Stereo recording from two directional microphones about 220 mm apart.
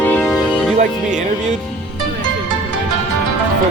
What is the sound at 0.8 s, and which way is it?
Music, 35° right (ahead or behind).